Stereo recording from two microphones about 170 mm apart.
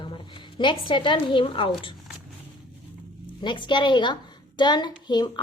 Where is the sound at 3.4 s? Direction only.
25° left (ahead or behind).